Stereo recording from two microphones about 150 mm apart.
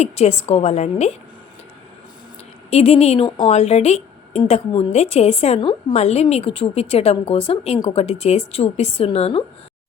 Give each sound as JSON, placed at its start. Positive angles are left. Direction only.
{"t": 0.0, "sound": "a woman's voice", "side_deg": 45}
{"t": 2.6, "sound": "a woman's voice", "side_deg": 45}